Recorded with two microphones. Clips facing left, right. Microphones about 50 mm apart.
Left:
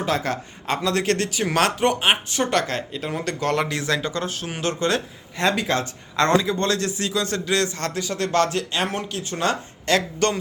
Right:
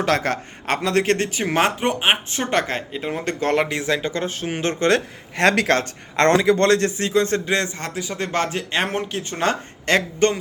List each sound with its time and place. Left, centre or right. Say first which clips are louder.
0.0 s speech: right 3 dB; right
1.5 s speech: even; centre
4.8 s speech: right 7 dB; right
6.7 s speech: right 5 dB; right
7.8 s speech: left 1 dB; centre; by 10.0 s right
10.2 s speech: right 5 dB; right